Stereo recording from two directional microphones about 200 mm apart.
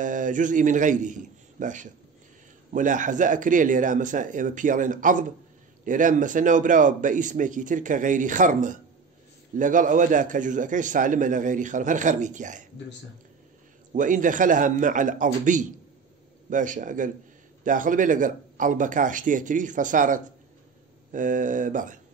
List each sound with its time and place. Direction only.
0.0 s a man's voice: 40° right (ahead or behind)
13.9 s a man's voice: 40° right (ahead or behind)